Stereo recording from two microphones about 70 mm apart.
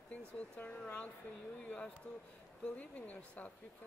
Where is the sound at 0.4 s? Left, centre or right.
Centre.